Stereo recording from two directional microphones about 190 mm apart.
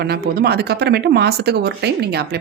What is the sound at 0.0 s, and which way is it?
Speech, 60° right (ahead or behind).